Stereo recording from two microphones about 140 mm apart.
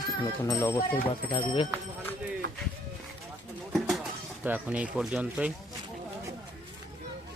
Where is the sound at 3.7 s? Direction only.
5° right (ahead or behind).